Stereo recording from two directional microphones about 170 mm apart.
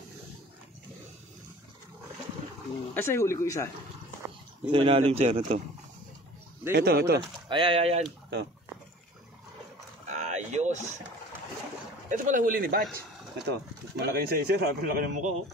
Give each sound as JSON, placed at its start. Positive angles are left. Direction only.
{"t": 2.9, "sound": "speech", "side_deg": 15}
{"t": 4.2, "sound": "a sound", "side_deg": -10}
{"t": 4.6, "sound": "speech", "side_deg": -35}
{"t": 6.7, "sound": "speech", "side_deg": -65}
{"t": 7.4, "sound": "speech", "side_deg": -30}
{"t": 10.0, "sound": "a sound", "side_deg": -40}
{"t": 12.1, "sound": "speech", "side_deg": -50}
{"t": 13.5, "sound": "speech", "side_deg": -70}